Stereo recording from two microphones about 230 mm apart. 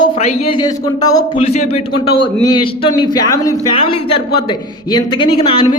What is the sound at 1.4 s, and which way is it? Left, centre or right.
Speech, left.